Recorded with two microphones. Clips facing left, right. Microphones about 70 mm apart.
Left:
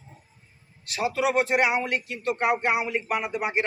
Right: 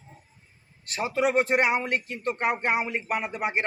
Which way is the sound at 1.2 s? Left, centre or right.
Right.